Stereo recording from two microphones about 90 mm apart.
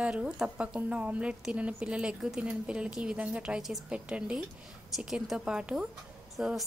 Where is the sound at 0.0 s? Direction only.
10° right (ahead or behind).